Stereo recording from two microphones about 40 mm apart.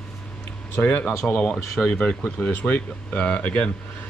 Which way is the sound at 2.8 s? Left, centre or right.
Left.